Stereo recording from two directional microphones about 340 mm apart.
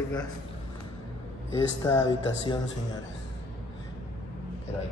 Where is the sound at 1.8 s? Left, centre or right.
Centre.